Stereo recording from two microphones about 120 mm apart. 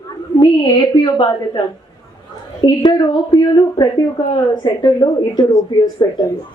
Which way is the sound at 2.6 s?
35° left (ahead or behind).